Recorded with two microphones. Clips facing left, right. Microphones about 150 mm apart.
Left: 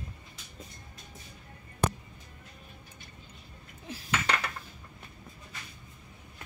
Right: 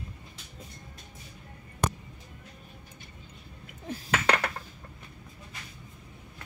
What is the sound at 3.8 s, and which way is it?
Dishes, 65° right (ahead or behind).